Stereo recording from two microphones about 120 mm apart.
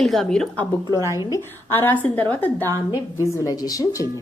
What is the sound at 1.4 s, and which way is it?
Speech, 20° left (ahead or behind).